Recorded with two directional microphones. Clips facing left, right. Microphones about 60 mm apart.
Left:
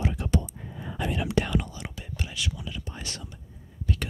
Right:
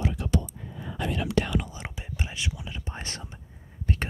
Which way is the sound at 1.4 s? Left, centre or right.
Centre.